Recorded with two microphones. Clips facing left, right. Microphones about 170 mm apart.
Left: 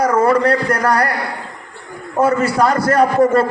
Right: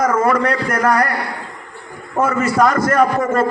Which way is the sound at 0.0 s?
30° left (ahead or behind).